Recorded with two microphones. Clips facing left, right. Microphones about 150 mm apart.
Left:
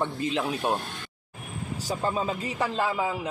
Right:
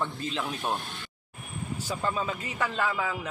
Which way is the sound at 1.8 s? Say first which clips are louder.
Left 3 dB; 35° left (ahead or behind).